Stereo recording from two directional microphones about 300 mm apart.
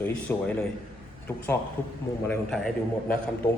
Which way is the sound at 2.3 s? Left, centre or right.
Centre.